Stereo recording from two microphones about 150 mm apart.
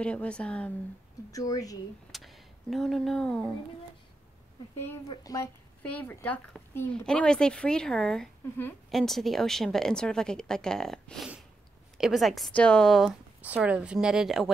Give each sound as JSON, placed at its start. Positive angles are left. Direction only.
{"t": 0.0, "sound": "a woman's voice", "side_deg": 5}
{"t": 1.3, "sound": "speech", "side_deg": 25}
{"t": 2.1, "sound": "speech", "side_deg": 0}
{"t": 5.1, "sound": "speech", "side_deg": 25}
{"t": 5.8, "sound": "a woman's voice", "side_deg": 10}